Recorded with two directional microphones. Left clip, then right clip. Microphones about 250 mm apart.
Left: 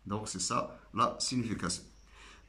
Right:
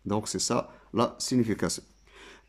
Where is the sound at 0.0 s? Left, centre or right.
Right.